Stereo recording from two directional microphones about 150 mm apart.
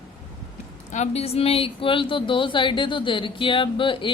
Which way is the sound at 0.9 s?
45° left (ahead or behind).